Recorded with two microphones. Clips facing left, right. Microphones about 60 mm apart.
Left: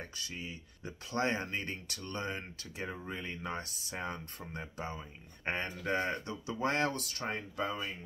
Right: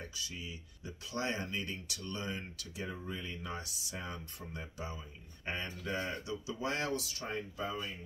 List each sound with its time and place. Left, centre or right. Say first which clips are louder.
0.0 s speech: left 1 dB; left